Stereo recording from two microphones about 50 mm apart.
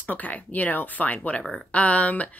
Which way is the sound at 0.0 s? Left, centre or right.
Left.